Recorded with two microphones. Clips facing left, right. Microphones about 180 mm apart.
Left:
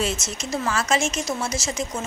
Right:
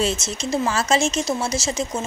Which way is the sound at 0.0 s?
25° right (ahead or behind).